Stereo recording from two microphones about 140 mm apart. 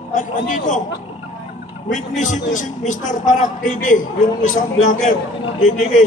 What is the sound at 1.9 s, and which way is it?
A man's voice, 60° left (ahead or behind).